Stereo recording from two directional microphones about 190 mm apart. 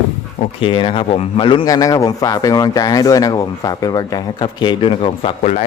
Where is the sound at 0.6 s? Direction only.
25° left (ahead or behind).